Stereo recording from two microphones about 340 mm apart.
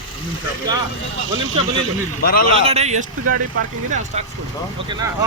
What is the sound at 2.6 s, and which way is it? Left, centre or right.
Speech, centre.